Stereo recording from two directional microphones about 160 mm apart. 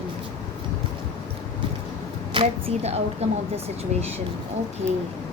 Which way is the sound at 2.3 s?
40° right (ahead or behind).